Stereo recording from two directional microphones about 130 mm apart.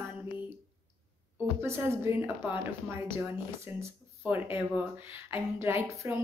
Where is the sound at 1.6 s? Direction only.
20° right (ahead or behind).